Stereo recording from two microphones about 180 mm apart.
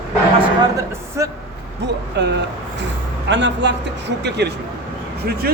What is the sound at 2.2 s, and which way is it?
Speech, 70° right (ahead or behind).